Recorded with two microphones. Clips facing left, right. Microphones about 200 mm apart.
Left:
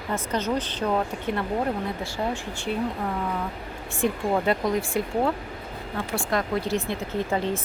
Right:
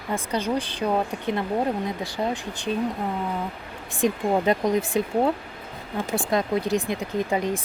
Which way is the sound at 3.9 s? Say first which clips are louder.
Right 2 dB; 20° right (ahead or behind).